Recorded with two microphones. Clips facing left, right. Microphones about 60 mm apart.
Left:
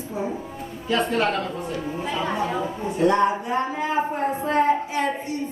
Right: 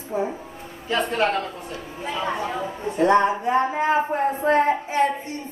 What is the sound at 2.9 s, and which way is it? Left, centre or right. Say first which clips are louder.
A woman's voice: right 2 dB; right.